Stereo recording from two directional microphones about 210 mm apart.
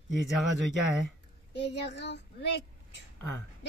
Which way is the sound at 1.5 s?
55° left (ahead or behind).